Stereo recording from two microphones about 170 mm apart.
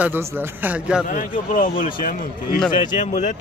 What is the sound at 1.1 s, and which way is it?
A man's voice, 50° left (ahead or behind).